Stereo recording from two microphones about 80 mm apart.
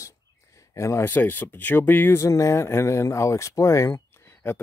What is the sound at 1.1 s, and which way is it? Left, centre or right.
Speech, left.